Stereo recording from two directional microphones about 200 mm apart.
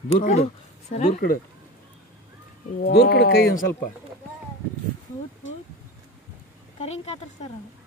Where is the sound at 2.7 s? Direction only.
50° left (ahead or behind).